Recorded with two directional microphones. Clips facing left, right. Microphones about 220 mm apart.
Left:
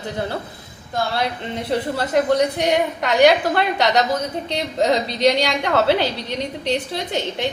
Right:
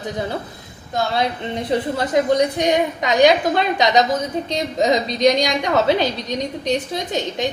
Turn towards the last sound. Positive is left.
turn(degrees=-15)  # may be behind; listen again after turning